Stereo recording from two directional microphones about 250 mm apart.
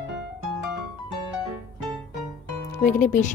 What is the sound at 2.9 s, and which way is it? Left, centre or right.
Speech, left.